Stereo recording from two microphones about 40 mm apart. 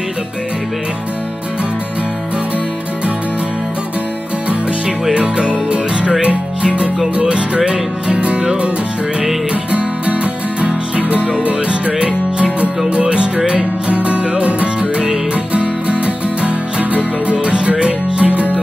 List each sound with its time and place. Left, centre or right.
5.1 s music: right
9.7 s music: right